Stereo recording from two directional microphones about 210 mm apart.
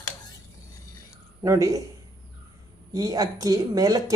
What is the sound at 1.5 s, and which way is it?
Speech, 15° right (ahead or behind).